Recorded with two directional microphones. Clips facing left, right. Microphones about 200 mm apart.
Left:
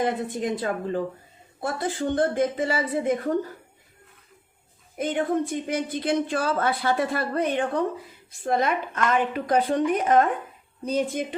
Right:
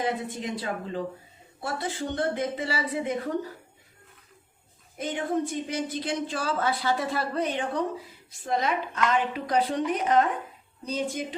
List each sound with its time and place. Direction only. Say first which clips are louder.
0.0 s a woman's voice: left 4 dB; 50° left (ahead or behind)
2.0 s a woman's voice: left 6 dB; 50° left (ahead or behind)
4.9 s a woman's voice: left 4 dB; 55° left (ahead or behind)